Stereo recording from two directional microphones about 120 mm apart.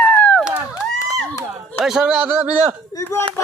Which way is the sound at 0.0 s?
10° left (ahead or behind).